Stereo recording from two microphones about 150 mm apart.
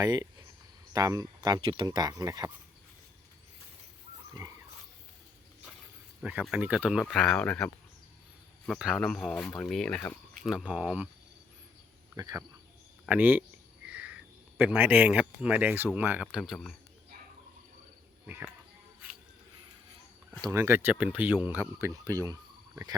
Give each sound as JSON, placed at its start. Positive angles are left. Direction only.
{"t": 0.0, "sound": "speech", "side_deg": -25}
{"t": 6.4, "sound": "speech", "side_deg": -5}
{"t": 10.5, "sound": "speech", "side_deg": -5}
{"t": 12.1, "sound": "speech", "side_deg": -20}
{"t": 13.8, "sound": "a sound", "side_deg": -10}
{"t": 14.6, "sound": "speech", "side_deg": -10}
{"t": 20.5, "sound": "speech", "side_deg": -15}